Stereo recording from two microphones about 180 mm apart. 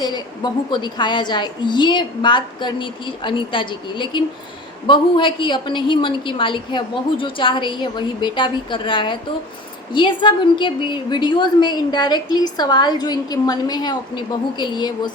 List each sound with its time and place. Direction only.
0.0 s a woman's voice: 25° left (ahead or behind)